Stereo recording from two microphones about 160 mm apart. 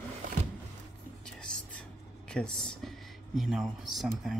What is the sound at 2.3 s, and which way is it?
Speech, 5° left (ahead or behind).